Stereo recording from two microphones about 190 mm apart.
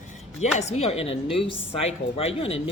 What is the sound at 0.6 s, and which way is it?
Speech, 35° left (ahead or behind).